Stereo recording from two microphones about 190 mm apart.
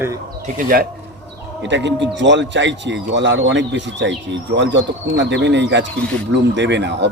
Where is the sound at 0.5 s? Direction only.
50° right (ahead or behind).